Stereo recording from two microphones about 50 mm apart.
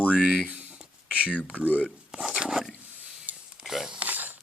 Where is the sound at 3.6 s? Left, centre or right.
Centre.